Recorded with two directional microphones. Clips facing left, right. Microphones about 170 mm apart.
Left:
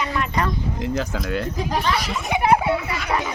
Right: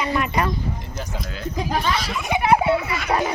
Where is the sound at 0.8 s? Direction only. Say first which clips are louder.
Left 7 dB; 90° left.